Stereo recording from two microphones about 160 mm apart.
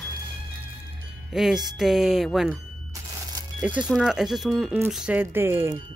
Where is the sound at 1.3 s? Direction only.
Centre (ahead or behind).